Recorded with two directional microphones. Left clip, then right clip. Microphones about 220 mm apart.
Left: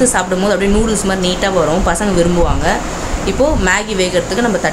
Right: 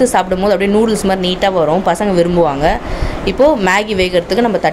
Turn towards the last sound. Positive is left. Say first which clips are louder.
# right 2 dB
turn(degrees=-25)  # may be behind; listen again after turning